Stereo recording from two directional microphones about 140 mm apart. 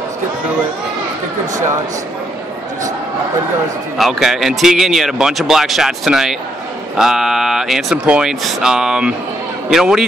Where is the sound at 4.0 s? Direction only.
5° right (ahead or behind).